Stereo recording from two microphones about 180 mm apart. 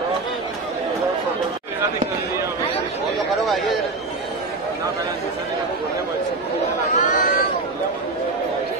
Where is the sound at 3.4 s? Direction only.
Centre (ahead or behind).